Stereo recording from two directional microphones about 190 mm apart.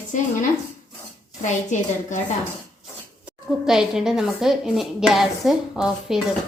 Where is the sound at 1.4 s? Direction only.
40° left (ahead or behind).